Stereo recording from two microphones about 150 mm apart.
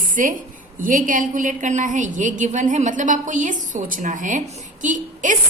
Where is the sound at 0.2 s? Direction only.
60° right (ahead or behind).